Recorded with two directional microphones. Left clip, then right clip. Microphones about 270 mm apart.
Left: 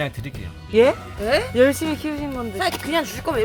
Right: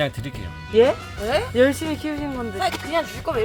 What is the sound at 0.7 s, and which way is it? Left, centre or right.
Speech, centre.